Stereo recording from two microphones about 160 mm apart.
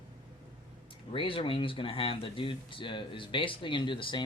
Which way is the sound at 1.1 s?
35° left (ahead or behind).